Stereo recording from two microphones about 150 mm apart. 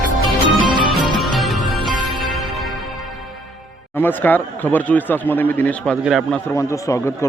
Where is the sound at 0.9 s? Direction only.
Centre (ahead or behind).